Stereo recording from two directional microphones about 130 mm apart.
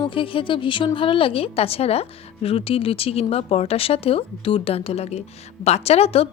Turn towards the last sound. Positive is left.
turn(degrees=50)  # may be behind; listen again after turning